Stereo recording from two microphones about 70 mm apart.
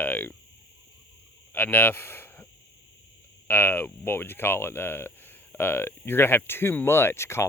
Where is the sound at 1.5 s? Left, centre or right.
Left.